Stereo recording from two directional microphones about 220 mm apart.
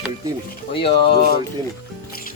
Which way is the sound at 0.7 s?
25° left (ahead or behind).